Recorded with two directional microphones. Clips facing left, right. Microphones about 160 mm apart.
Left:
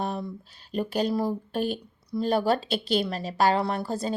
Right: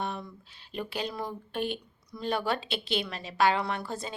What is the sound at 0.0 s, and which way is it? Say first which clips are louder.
Speech: left 5 dB; 35° left (ahead or behind).